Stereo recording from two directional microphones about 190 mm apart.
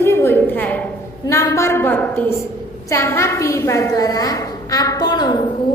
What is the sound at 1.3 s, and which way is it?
A woman's voice, 15° left (ahead or behind).